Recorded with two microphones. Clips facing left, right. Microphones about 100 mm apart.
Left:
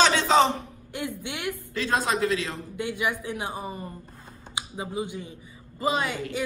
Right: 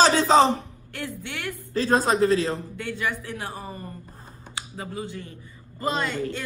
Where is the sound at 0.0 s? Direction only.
40° right (ahead or behind).